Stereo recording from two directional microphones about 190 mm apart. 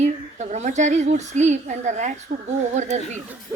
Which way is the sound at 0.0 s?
40° right (ahead or behind).